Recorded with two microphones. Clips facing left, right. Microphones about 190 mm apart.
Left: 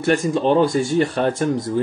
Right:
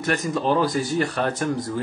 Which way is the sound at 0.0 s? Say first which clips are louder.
Left 6 dB; 30° left (ahead or behind).